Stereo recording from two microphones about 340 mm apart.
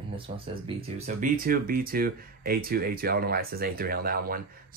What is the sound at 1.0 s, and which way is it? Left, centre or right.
Speech, right.